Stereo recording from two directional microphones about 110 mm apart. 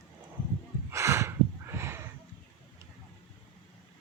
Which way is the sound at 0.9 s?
25° right (ahead or behind).